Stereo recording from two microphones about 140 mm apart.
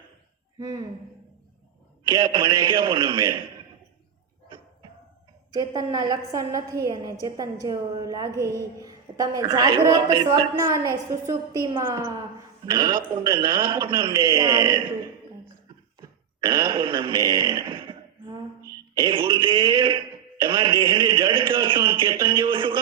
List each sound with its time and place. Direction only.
0.6 s a woman's voice: 25° right (ahead or behind)
2.0 s speech: 30° right (ahead or behind)
4.4 s a sound: 35° right (ahead or behind)
5.5 s a woman's voice: 30° right (ahead or behind)
16.0 s a sound: 30° right (ahead or behind)
18.6 s throat clearing: 25° right (ahead or behind)
19.0 s speech: 35° right (ahead or behind)